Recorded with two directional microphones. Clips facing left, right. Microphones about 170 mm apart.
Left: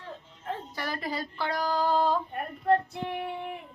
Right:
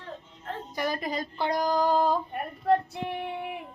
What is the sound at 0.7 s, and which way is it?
Speech, 15° right (ahead or behind).